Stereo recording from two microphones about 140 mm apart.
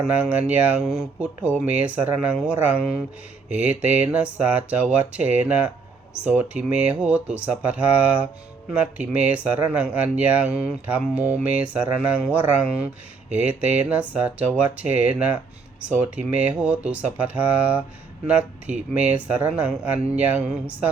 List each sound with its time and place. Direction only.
0.0 s speech: 10° right (ahead or behind)